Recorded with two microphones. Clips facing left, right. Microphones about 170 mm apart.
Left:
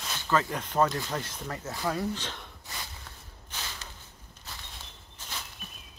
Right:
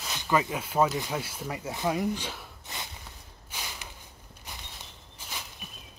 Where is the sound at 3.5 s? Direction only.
10° right (ahead or behind).